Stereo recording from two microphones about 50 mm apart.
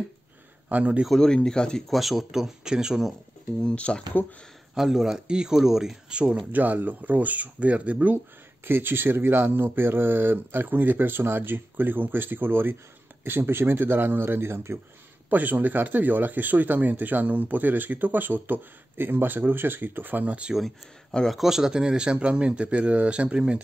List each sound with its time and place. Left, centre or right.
0.7 s speech: right
1.1 s speech: centre
1.9 s a man's voice: centre
3.6 s speech: left
4.7 s a man's voice: centre
6.5 s speech: right
8.6 s speech: right
15.2 s speech: right
21.3 s speech: centre